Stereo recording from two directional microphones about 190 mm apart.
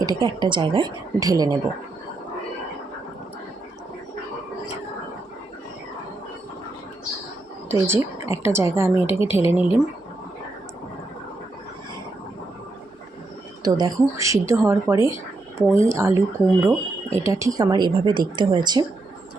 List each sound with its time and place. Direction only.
0.0 s speech: 25° right (ahead or behind)
7.7 s a woman's voice: 15° right (ahead or behind)
13.6 s a woman's voice: 20° right (ahead or behind)